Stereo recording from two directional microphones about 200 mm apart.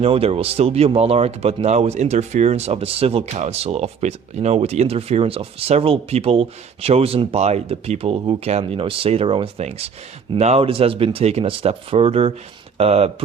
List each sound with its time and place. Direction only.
0.0 s speech: 30° right (ahead or behind)